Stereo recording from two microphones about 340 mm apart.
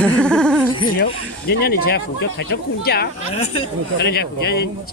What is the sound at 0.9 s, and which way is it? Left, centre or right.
Speech, left.